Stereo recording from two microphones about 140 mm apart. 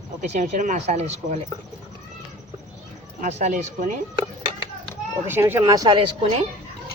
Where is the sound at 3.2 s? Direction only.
55° right (ahead or behind).